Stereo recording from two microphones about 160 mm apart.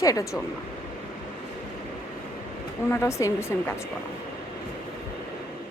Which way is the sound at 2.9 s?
15° left (ahead or behind).